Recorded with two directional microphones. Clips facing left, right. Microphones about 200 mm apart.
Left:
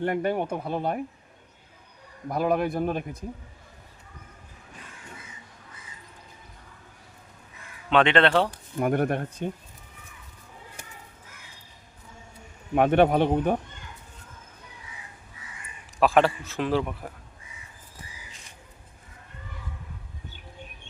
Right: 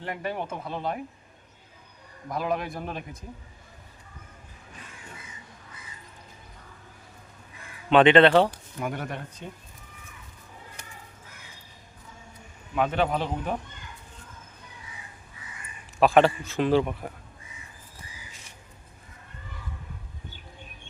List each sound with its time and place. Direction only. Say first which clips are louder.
0.0 s speech: left 7 dB; 50° left (ahead or behind)
2.3 s speech: left 5 dB; 50° left (ahead or behind)
7.9 s a man's voice: right 4 dB; centre (ahead or behind)
8.8 s speech: left 8 dB; 50° left (ahead or behind)
12.7 s speech: left 6 dB; 55° left (ahead or behind)
16.0 s a man's voice: right 1 dB; centre (ahead or behind)